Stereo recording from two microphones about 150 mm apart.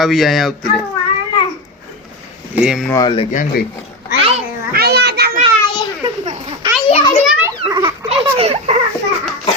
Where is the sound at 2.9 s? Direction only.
25° left (ahead or behind).